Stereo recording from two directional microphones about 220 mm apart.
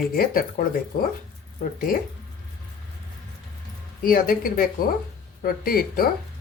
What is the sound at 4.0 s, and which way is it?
Speech, 40° left (ahead or behind).